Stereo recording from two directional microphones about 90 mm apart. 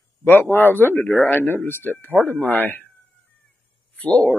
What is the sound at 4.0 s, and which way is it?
Speech, 15° left (ahead or behind).